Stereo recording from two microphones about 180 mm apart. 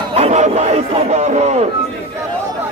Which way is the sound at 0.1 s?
35° right (ahead or behind).